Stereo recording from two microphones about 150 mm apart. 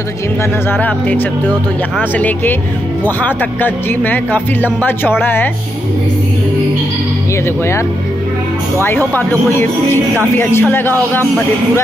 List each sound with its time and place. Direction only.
0.7 s speech: 10° left (ahead or behind)
7.4 s speech: 15° left (ahead or behind)
8.8 s speech: 10° left (ahead or behind)